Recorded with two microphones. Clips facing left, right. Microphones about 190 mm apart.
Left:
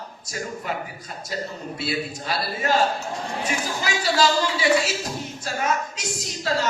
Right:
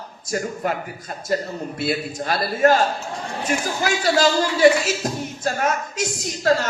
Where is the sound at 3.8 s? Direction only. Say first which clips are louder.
Right 3 dB; 55° right (ahead or behind).